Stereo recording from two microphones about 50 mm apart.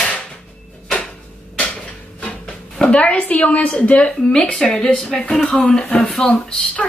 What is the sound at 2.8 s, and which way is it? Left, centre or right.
A woman's voice, left.